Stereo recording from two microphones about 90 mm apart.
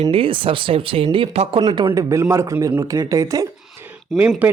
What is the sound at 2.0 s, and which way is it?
Speech, 35° right (ahead or behind).